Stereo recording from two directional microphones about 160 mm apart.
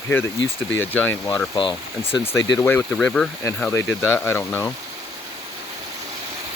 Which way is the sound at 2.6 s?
10° left (ahead or behind).